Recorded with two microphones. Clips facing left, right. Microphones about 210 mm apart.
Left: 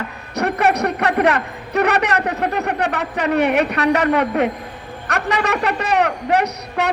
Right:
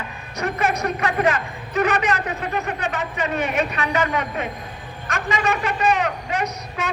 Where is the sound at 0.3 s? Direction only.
65° left (ahead or behind).